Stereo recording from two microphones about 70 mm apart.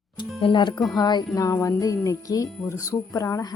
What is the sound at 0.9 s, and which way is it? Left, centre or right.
Speech, left.